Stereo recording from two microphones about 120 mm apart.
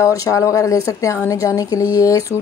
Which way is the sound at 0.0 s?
25° left (ahead or behind).